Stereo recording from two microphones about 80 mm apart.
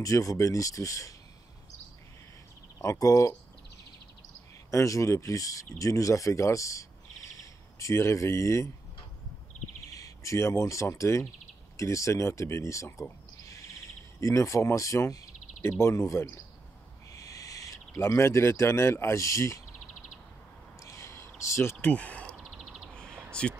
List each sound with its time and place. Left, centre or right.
0.0 s speech: left
2.8 s speech: left
4.6 s speech: left
9.8 s speech: left
13.5 s a sound: left
15.8 s speech: left
20.8 s a sound: left
21.8 s speech: centre
22.4 s bird: centre
23.3 s speech: centre